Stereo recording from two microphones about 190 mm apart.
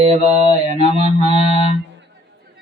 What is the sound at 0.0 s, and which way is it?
Mantra, 35° right (ahead or behind).